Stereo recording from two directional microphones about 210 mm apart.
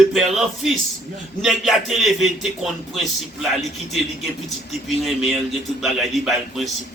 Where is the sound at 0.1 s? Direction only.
Centre (ahead or behind).